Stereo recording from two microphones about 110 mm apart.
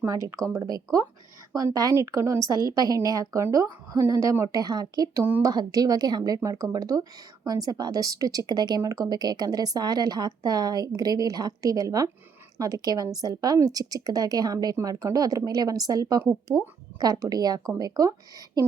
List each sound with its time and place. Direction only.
0.0 s a woman's voice: 25° right (ahead or behind)